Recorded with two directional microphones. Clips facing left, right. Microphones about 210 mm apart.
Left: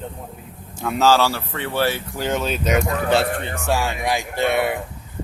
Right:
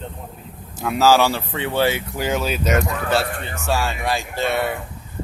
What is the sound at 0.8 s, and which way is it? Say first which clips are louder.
Speech: right 1 dB; 5° right (ahead or behind).